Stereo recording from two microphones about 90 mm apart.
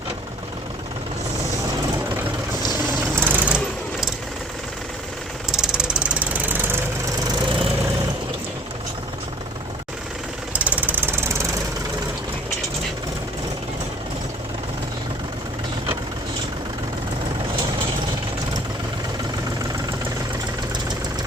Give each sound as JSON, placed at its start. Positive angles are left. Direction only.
{"t": 3.2, "sound": "sewing machine", "side_deg": -20}
{"t": 5.5, "sound": "vehicle", "side_deg": -5}
{"t": 10.5, "sound": "engine knocking", "side_deg": -15}